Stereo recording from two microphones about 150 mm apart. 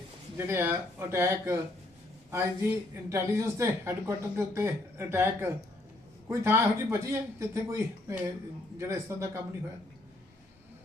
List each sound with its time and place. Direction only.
0.3 s a man's voice: 15° right (ahead or behind)